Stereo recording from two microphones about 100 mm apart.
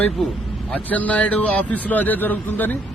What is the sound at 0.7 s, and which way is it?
A man's voice, 15° left (ahead or behind).